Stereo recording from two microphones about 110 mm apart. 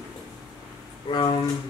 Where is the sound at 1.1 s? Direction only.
45° left (ahead or behind).